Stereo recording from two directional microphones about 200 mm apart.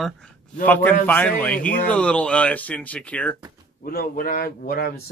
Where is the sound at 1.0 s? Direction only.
10° left (ahead or behind).